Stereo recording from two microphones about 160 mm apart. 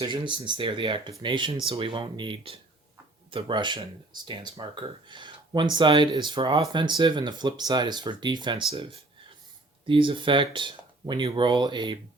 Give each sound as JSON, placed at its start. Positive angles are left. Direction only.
{"t": 0.0, "sound": "speech", "side_deg": -30}